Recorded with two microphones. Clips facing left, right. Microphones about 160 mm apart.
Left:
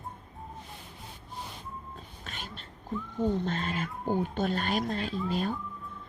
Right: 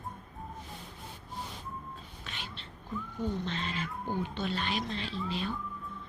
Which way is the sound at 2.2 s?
45° left (ahead or behind).